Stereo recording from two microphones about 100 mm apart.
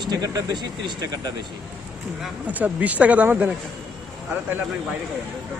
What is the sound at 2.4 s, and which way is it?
Speech, 15° right (ahead or behind).